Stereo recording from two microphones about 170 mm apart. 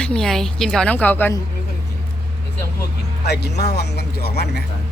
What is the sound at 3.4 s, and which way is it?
Speech, 75° left (ahead or behind).